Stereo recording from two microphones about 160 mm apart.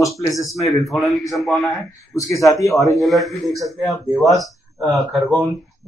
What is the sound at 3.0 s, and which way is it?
Speech, centre (ahead or behind).